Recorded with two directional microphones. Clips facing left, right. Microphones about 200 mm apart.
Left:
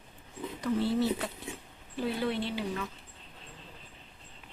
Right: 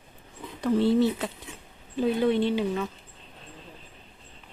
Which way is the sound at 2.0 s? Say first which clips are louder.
Right 8 dB; 20° right (ahead or behind).